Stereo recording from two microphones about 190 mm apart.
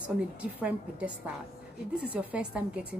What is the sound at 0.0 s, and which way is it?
A woman's voice, 5° right (ahead or behind).